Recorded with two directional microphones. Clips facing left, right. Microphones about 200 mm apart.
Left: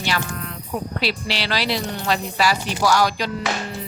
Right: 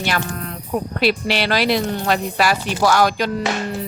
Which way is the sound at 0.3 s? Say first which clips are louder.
Right 3 dB; 40° right (ahead or behind).